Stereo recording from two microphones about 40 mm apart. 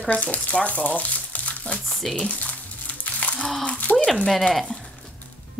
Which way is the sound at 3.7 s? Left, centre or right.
Left.